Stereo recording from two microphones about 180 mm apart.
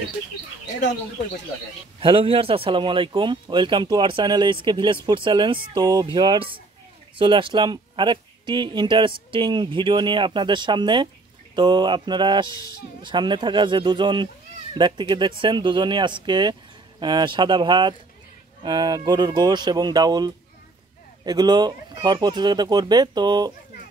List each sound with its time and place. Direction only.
2.0 s speech: 30° right (ahead or behind)